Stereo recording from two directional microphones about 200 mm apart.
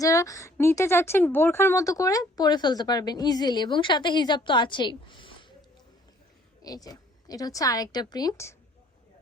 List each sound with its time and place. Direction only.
0.0 s a woman's voice: 15° left (ahead or behind)
6.6 s a woman's voice: 20° left (ahead or behind)